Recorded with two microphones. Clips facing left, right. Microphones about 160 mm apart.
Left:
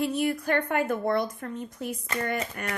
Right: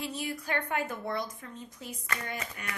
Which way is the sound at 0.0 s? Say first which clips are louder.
Left 10 dB; 55° left (ahead or behind).